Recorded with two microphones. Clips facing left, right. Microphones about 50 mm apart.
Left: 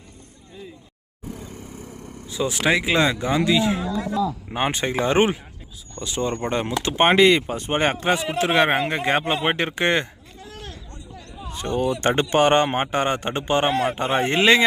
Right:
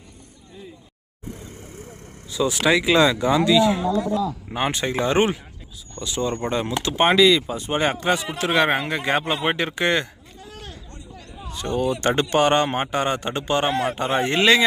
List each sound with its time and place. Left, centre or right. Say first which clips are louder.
2.3 s a man's voice: right 2 dB; left
4.2 s speech: left 2 dB; centre
4.5 s a man's voice: even; left
7.9 s a man's voice: left 1 dB; left
10.4 s a sound: left 1 dB; centre
11.4 s a sound: even; left
11.9 s a man's voice: left 1 dB; left